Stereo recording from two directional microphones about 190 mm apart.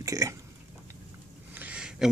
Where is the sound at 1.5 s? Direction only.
5° right (ahead or behind).